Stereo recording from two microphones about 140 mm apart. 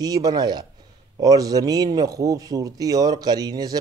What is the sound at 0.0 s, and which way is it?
A man's voice, 25° right (ahead or behind).